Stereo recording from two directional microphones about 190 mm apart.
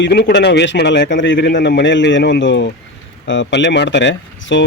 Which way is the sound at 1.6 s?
60° left (ahead or behind).